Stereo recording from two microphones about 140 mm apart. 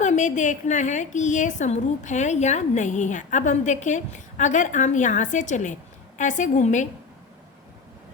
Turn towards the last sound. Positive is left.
turn(degrees=60)  # may be behind; listen again after turning